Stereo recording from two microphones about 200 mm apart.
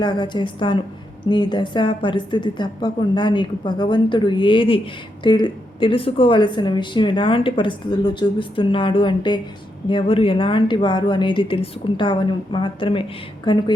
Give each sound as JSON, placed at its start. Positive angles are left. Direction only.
{"t": 0.0, "sound": "speech", "side_deg": 20}